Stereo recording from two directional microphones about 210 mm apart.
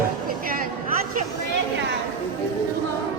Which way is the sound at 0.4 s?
40° right (ahead or behind).